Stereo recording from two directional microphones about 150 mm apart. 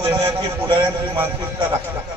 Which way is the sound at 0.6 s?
35° right (ahead or behind).